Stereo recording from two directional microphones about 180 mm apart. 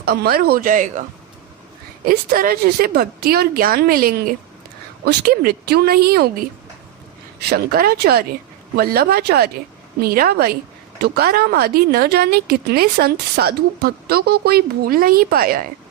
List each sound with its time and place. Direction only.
0.0 s a woman's voice: 60° right (ahead or behind)
2.0 s a woman's voice: 55° right (ahead or behind)
7.3 s a woman's voice: 60° right (ahead or behind)